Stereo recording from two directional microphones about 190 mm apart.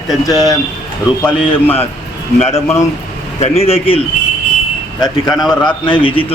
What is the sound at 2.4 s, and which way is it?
Speech, 15° left (ahead or behind).